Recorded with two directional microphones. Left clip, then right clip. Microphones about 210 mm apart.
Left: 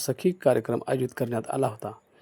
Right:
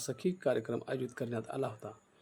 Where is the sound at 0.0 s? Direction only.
30° left (ahead or behind).